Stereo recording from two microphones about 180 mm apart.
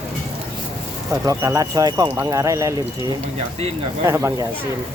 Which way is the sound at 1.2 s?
20° right (ahead or behind).